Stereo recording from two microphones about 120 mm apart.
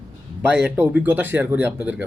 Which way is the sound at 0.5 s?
10° right (ahead or behind).